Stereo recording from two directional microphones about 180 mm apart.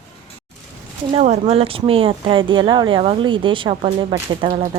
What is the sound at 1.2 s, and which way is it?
Speech, 35° right (ahead or behind).